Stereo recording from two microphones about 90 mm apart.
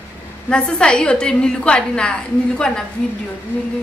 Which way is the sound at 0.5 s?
10° left (ahead or behind).